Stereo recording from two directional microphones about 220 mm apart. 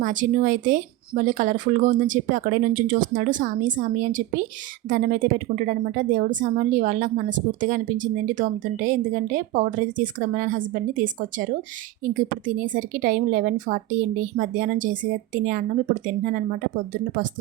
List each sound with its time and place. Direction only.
0.0 s a woman's voice: 35° right (ahead or behind)